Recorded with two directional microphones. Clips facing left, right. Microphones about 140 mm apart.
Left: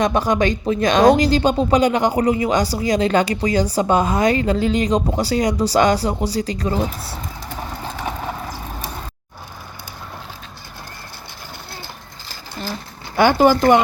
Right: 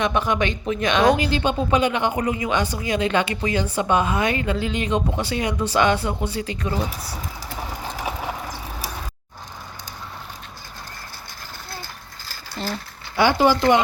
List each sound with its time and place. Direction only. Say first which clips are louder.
0.0 s speech: left 4 dB; 40° left (ahead or behind)
7.5 s vehicle: left 2 dB; 10° right (ahead or behind)
13.1 s speech: left 4 dB; 50° left (ahead or behind)